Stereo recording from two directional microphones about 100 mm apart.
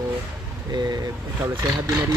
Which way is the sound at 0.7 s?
45° right (ahead or behind).